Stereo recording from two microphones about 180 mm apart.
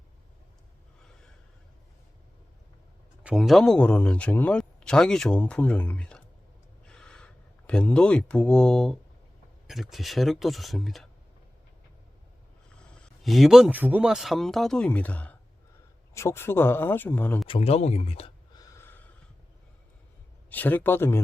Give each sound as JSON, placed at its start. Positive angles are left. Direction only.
{"t": 3.2, "sound": "speech", "side_deg": 0}
{"t": 6.8, "sound": "a sound", "side_deg": 5}
{"t": 9.6, "sound": "speech", "side_deg": 0}
{"t": 13.0, "sound": "speech", "side_deg": 0}
{"t": 17.4, "sound": "speech", "side_deg": 30}
{"t": 18.6, "sound": "snort", "side_deg": 15}
{"t": 20.5, "sound": "speech", "side_deg": 10}